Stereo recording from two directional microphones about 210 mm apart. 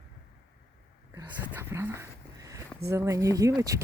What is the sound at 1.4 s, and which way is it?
Speech, 10° right (ahead or behind).